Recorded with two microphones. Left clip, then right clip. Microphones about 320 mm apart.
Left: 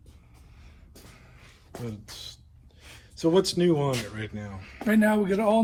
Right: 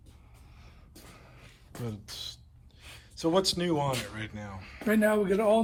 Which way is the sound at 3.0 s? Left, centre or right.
Centre.